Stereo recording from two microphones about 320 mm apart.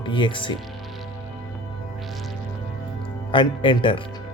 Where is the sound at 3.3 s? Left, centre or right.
Centre.